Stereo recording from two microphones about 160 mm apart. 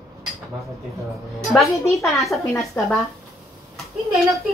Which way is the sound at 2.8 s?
15° left (ahead or behind).